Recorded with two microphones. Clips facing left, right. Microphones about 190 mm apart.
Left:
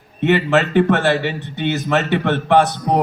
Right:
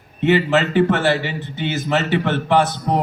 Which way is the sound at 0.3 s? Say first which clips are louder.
Even; 55° left (ahead or behind).